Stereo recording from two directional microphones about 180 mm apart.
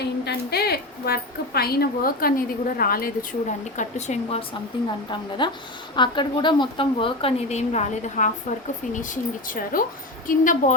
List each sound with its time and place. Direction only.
0.0 s a woman's voice: 65° left (ahead or behind); by 4.4 s 35° left (ahead or behind)
5.4 s a woman's voice: 25° left (ahead or behind); by 10.8 s 45° left (ahead or behind)